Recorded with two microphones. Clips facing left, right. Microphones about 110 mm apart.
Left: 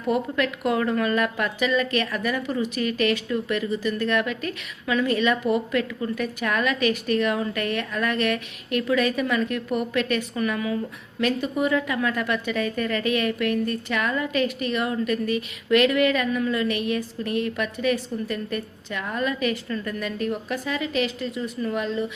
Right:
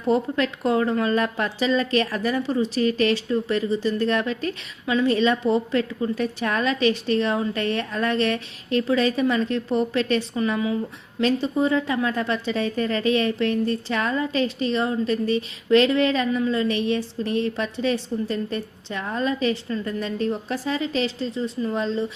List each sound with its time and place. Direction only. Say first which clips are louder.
0.1 s a woman's voice: right 2 dB; 30° right (ahead or behind)